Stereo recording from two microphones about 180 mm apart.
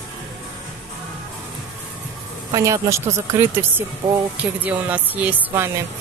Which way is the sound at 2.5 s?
15° right (ahead or behind).